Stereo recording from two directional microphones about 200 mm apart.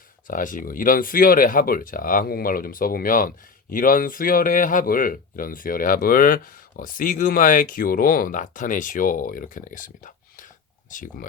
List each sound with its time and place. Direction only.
0.3 s speech: 40° left (ahead or behind)